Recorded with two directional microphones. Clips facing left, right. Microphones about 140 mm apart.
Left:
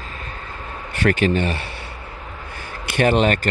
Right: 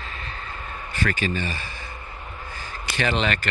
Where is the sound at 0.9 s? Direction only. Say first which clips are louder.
Left 8 dB; 60° left (ahead or behind).